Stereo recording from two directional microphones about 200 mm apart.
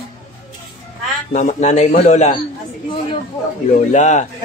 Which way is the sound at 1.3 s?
35° left (ahead or behind).